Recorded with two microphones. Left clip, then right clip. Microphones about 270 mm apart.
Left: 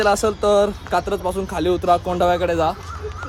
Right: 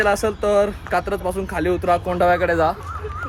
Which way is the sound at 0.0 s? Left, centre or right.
Centre.